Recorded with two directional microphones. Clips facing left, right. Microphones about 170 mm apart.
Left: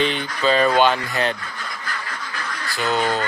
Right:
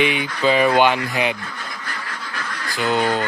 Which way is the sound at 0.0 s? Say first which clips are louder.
Right 2 dB; 10° right (ahead or behind).